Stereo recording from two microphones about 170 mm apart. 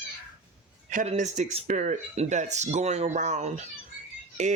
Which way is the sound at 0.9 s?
50° right (ahead or behind).